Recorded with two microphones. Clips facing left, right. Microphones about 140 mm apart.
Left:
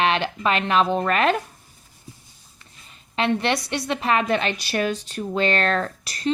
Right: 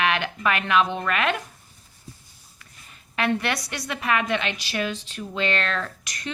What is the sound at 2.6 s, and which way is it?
A woman's voice, 25° left (ahead or behind).